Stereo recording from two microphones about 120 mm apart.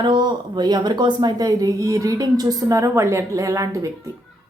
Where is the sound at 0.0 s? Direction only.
40° right (ahead or behind).